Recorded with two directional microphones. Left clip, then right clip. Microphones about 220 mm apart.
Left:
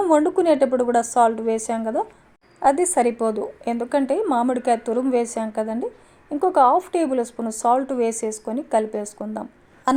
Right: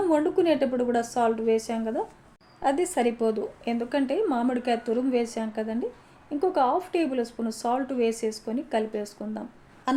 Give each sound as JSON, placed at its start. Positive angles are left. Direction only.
{"t": 0.0, "sound": "a woman's voice", "side_deg": 35}